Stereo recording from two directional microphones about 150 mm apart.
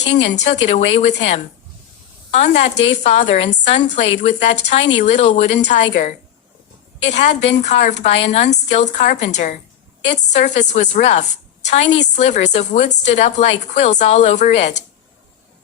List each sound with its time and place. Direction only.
0.4 s a woman's voice: 50° left (ahead or behind)